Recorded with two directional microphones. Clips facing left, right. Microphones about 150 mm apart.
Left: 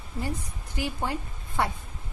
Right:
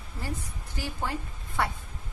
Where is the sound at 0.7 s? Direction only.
15° left (ahead or behind).